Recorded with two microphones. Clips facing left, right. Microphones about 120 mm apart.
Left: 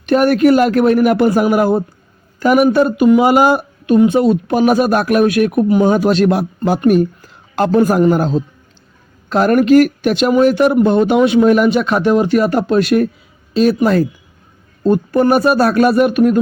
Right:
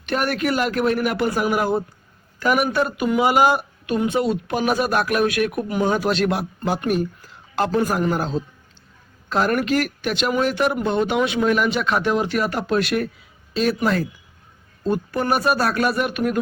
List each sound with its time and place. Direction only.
0.0 s speech: 40° left (ahead or behind)
9.3 s speech: 50° left (ahead or behind)